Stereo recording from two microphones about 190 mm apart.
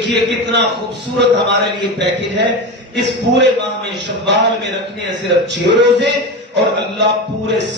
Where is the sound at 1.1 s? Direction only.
65° right (ahead or behind).